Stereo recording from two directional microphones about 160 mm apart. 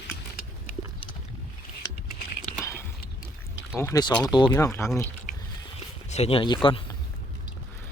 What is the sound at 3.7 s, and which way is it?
Speech, 15° left (ahead or behind).